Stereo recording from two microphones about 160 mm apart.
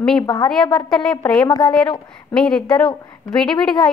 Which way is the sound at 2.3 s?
5° left (ahead or behind).